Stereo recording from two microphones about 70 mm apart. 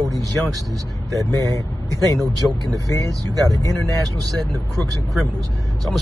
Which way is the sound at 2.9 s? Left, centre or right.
Right.